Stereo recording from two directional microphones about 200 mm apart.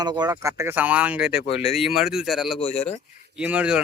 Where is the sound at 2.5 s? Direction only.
30° left (ahead or behind).